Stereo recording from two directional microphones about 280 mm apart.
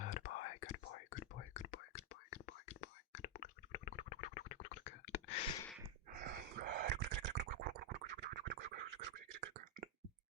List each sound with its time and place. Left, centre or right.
0.0 s whispering: left
5.5 s a sound: centre
6.1 s scratch: right